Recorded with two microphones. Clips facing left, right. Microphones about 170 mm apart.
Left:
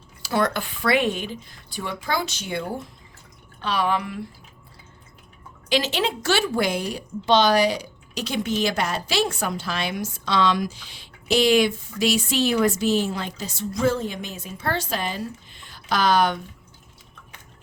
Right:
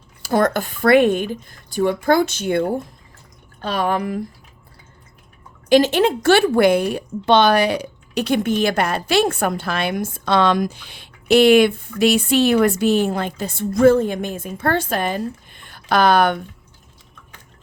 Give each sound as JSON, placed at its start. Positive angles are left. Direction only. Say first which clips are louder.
{"t": 0.2, "sound": "speech", "louder": "right 5 dB", "side_deg": -45}
{"t": 5.6, "sound": "speech", "louder": "right 9 dB", "side_deg": -50}